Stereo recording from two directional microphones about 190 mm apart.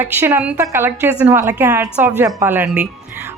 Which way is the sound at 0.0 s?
10° right (ahead or behind).